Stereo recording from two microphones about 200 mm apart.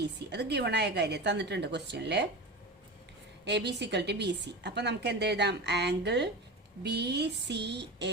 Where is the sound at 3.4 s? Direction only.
60° right (ahead or behind).